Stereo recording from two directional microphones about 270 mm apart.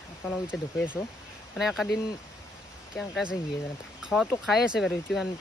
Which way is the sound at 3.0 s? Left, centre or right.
Centre.